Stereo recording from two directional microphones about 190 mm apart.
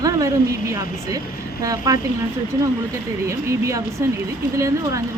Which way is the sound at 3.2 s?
15° right (ahead or behind).